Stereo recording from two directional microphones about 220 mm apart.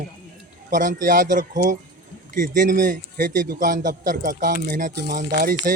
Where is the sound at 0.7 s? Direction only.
35° right (ahead or behind).